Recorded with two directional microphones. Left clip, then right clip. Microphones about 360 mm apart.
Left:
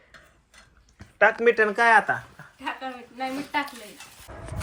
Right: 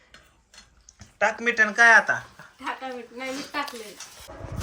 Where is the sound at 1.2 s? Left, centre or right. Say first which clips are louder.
Left 3 dB; centre.